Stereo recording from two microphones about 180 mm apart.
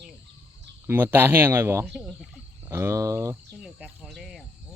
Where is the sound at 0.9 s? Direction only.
10° right (ahead or behind).